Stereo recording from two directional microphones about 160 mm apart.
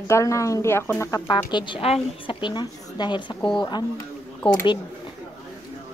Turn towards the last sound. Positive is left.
turn(degrees=25)  # may be behind; listen again after turning